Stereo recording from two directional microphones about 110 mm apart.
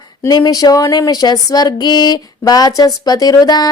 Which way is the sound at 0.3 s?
40° left (ahead or behind).